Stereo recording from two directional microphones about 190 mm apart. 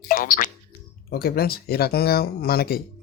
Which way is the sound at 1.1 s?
55° left (ahead or behind).